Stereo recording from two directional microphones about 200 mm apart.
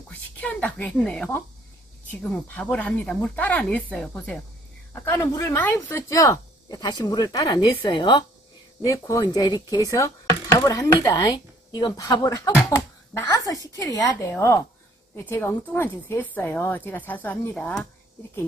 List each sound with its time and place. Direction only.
0.1 s speech: 5° left (ahead or behind)